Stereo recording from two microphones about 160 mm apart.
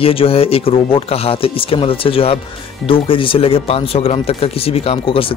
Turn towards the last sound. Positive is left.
turn(degrees=35)  # may be behind; listen again after turning